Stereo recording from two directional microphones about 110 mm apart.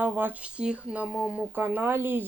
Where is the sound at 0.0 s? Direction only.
15° right (ahead or behind).